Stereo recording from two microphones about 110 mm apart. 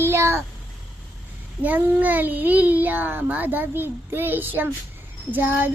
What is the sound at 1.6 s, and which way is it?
A child's voice, 15° right (ahead or behind).